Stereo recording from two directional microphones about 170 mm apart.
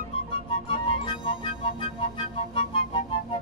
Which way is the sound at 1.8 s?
35° left (ahead or behind).